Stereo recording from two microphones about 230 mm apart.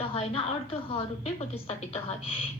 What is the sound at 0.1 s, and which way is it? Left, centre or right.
A woman's voice, left.